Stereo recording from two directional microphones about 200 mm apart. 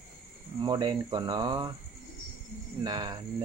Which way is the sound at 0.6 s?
20° right (ahead or behind).